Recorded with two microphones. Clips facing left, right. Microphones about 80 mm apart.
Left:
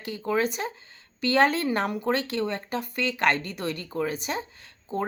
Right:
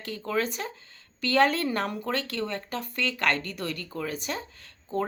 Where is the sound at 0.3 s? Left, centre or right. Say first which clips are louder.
Left 3 dB; centre.